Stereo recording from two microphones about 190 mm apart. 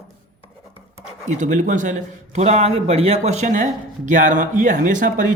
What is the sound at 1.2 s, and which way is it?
Speech, 40° right (ahead or behind).